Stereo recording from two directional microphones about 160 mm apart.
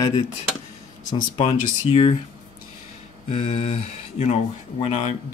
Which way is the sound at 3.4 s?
40° left (ahead or behind).